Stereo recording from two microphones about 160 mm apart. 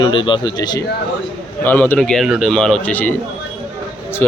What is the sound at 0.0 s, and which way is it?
Speech, 30° left (ahead or behind).